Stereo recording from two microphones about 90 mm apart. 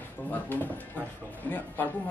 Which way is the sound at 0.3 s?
20° left (ahead or behind).